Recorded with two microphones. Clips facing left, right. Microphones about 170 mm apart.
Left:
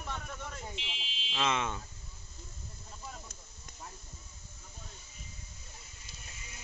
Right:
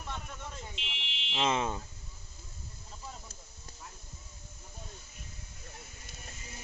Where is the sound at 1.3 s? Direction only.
30° right (ahead or behind).